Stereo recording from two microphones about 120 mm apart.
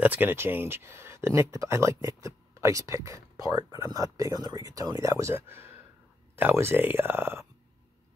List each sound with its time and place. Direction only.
0.0 s speech: 15° right (ahead or behind)